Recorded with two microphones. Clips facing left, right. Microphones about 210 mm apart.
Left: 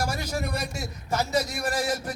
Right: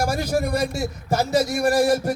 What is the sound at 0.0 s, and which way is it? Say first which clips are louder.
A man's voice: right 7 dB; 50° right (ahead or behind).